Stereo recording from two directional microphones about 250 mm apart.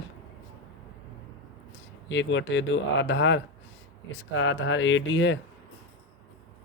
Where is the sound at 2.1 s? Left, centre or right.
Left.